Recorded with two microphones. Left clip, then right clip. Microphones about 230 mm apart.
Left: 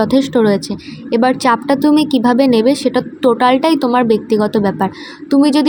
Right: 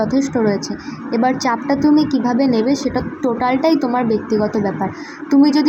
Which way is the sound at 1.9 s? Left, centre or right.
Left.